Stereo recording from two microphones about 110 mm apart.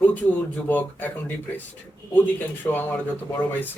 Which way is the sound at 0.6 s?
15° left (ahead or behind).